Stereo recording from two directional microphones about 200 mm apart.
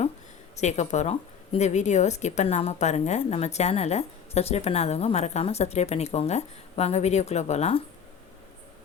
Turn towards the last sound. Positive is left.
turn(degrees=35)  # may be behind; listen again after turning